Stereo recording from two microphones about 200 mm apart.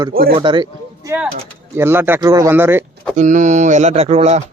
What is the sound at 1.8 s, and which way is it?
Speech, 10° right (ahead or behind).